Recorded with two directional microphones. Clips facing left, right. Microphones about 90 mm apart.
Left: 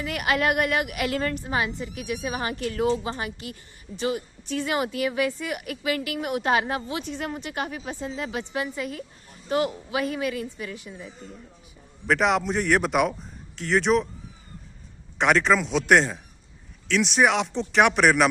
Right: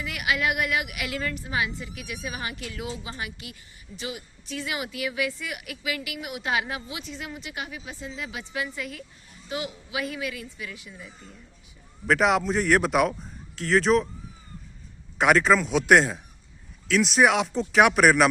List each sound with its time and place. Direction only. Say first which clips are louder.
0.0 s speech: left 3 dB; 40° left (ahead or behind)
9.5 s speech: left 8 dB; 45° left (ahead or behind)
12.0 s speech: even; centre (ahead or behind)
15.2 s speech: right 1 dB; 5° right (ahead or behind)